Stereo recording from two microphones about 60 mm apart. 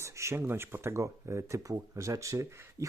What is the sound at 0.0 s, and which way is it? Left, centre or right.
Speech, right.